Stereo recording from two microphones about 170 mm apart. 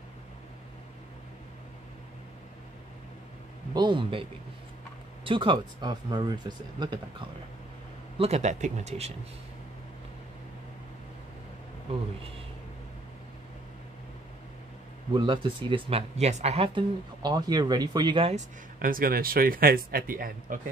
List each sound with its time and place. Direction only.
3.7 s speech: 25° right (ahead or behind)
8.2 s speech: 40° right (ahead or behind)
15.1 s speech: 30° right (ahead or behind)
18.8 s speech: 55° right (ahead or behind)